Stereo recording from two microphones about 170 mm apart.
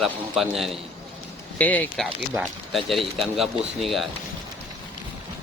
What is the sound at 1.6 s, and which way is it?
Speech, 10° left (ahead or behind).